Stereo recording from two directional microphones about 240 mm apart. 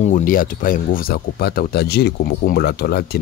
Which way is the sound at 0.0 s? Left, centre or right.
Left.